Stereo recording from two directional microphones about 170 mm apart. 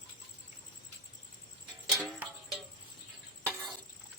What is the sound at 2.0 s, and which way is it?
Music, 10° right (ahead or behind).